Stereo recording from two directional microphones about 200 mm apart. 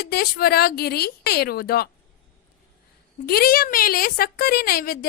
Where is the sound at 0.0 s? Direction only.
50° left (ahead or behind).